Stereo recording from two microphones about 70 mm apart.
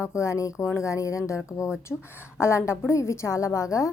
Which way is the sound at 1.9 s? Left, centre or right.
Centre.